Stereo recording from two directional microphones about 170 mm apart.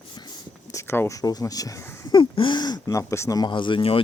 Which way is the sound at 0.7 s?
15° left (ahead or behind).